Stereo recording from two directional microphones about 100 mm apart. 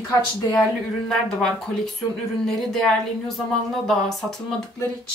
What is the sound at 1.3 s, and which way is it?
Speech, 5° left (ahead or behind).